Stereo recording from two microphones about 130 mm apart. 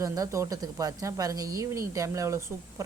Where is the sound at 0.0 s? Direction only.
25° right (ahead or behind).